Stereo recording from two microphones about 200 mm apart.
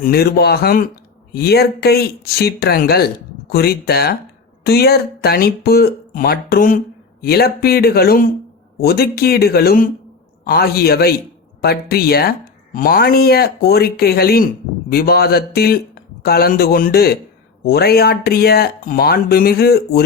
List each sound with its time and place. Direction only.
0.0 s speech: 50° left (ahead or behind)